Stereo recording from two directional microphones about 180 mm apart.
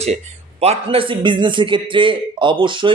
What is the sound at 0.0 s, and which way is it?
A man's voice, 35° right (ahead or behind).